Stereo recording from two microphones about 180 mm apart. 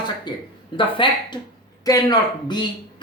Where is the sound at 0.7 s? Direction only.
25° left (ahead or behind).